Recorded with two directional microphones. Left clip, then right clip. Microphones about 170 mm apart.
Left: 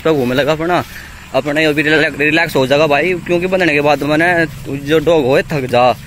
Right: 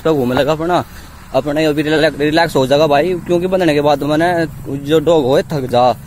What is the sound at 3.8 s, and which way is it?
Speech, 30° left (ahead or behind).